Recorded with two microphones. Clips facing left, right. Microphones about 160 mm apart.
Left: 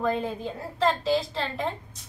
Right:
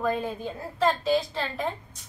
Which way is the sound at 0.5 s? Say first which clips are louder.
Right 1 dB; centre (ahead or behind).